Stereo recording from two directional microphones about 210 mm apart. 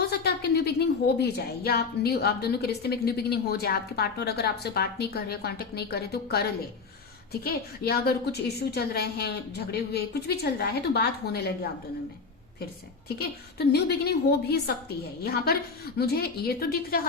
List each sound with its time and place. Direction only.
0.0 s a woman's voice: 50° left (ahead or behind)
13.1 s a woman's voice: 50° left (ahead or behind)